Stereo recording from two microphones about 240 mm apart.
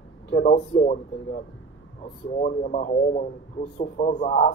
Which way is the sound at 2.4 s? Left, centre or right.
Left.